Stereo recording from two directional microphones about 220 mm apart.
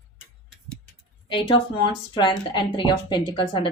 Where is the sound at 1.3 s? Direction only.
20° left (ahead or behind).